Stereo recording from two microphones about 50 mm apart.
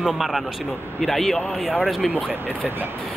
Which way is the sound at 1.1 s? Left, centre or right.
Centre.